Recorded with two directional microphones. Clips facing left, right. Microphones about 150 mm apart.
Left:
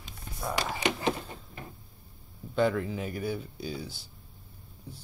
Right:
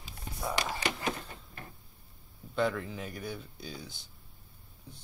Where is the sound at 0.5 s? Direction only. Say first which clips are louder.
Left 2 dB; 10° left (ahead or behind).